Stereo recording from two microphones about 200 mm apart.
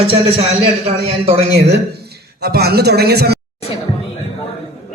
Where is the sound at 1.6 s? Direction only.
55° right (ahead or behind).